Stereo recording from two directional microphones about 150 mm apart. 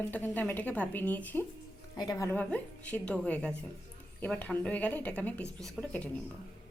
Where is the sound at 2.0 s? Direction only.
25° left (ahead or behind).